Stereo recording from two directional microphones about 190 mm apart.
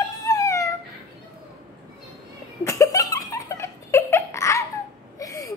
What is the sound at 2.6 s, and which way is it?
Giggle, 15° left (ahead or behind).